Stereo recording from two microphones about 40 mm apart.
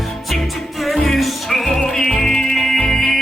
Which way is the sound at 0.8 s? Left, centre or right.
Centre.